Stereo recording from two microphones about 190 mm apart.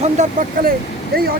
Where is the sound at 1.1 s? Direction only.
50° right (ahead or behind).